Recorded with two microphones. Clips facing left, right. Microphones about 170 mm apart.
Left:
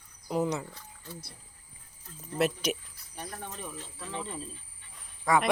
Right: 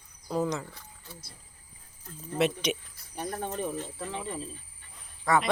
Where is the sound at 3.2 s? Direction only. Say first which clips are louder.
Right 8 dB; 50° right (ahead or behind).